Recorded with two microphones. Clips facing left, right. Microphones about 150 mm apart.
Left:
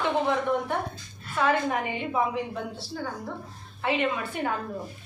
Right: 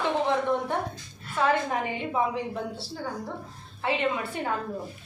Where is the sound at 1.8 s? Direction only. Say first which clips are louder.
Even; 30° right (ahead or behind).